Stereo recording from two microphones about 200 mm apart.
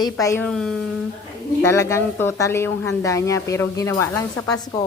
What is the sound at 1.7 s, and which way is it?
A woman's voice, 15° left (ahead or behind).